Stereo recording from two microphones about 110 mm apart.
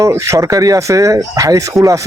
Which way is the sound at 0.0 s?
25° right (ahead or behind).